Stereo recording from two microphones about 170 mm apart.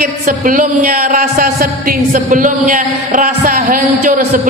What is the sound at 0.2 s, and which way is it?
A man's voice, 55° right (ahead or behind).